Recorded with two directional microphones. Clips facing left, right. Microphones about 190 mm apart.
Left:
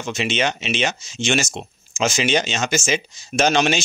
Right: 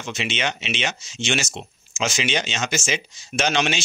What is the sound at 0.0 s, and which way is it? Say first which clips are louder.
Speech: left 5 dB; 45° left (ahead or behind).